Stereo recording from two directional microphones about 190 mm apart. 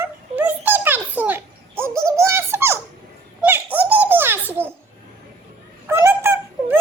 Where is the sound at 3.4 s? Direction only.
10° right (ahead or behind).